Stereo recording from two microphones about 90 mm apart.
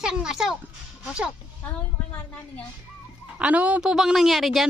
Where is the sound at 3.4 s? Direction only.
15° right (ahead or behind).